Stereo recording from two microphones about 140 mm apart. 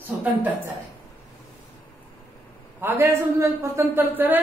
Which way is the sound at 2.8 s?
20° right (ahead or behind).